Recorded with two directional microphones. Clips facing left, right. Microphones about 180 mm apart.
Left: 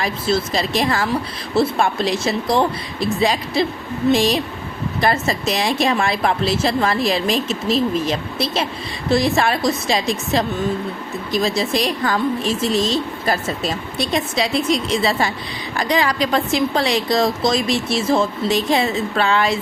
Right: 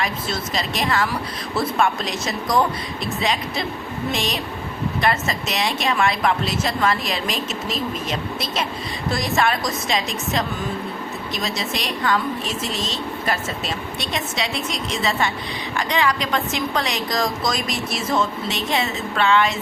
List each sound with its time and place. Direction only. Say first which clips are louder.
0.0 s speech: left 6 dB; 30° left (ahead or behind)